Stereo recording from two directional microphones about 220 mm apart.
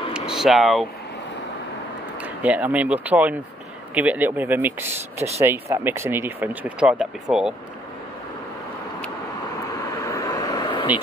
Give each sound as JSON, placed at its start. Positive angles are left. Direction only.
{"t": 0.1, "sound": "a sound", "side_deg": 0}
{"t": 2.1, "sound": "speech", "side_deg": -5}
{"t": 9.9, "sound": "vehicle", "side_deg": 15}